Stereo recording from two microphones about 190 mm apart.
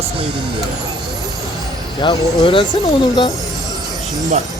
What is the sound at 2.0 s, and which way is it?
Speech, 25° left (ahead or behind).